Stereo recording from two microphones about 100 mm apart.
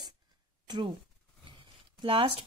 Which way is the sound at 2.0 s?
60° right (ahead or behind).